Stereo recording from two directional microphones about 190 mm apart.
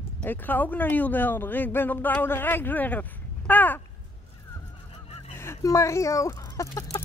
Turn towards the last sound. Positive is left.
turn(degrees=15)  # may be behind; listen again after turning